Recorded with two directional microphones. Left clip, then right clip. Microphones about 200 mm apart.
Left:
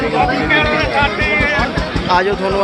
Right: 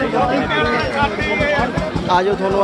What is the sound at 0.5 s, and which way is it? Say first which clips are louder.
Music: left 4 dB; 50° right (ahead or behind).